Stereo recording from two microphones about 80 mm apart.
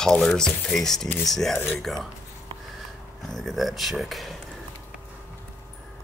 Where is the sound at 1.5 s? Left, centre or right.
Left.